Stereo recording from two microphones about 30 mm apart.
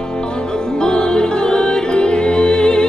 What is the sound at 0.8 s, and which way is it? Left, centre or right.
Music, left.